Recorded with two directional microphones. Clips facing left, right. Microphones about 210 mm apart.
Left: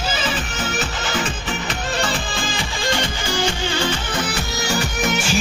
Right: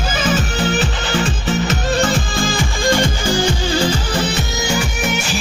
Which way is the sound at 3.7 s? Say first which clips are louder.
Right 5 dB; 35° right (ahead or behind).